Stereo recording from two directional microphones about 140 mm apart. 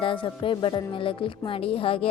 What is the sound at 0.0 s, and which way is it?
Speech, 35° left (ahead or behind).